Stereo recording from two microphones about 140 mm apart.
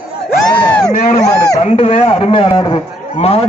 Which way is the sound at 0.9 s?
60° left (ahead or behind).